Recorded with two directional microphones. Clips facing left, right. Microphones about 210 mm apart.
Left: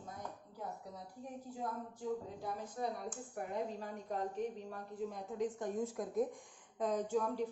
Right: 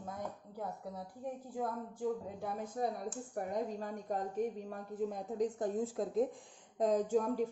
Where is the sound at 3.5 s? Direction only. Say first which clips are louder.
Right 1 dB; 45° right (ahead or behind); by 6.3 s 25° right (ahead or behind).